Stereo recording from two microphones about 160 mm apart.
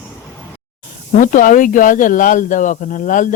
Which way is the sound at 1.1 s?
55° left (ahead or behind).